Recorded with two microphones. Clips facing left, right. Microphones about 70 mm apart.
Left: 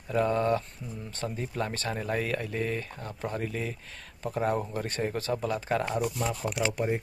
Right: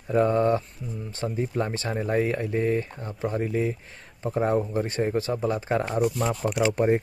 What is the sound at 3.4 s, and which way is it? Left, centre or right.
Speech, right.